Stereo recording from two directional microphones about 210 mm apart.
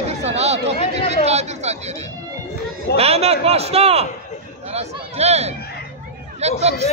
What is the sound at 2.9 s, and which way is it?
A man's voice, 30° right (ahead or behind).